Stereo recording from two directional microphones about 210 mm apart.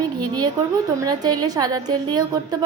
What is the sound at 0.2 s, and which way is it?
A woman's voice, 20° right (ahead or behind).